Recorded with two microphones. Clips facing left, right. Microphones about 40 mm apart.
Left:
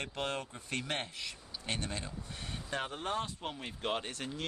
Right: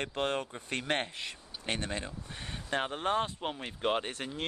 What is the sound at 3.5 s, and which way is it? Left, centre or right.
Speech, centre.